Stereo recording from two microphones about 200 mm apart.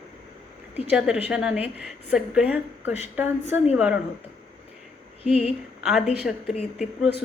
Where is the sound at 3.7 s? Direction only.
5° right (ahead or behind).